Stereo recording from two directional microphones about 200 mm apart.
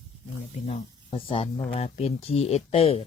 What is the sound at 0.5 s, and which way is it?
Speech, 30° left (ahead or behind).